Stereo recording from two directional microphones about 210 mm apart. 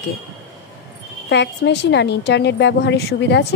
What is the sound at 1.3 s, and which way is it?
A woman's voice, 55° left (ahead or behind).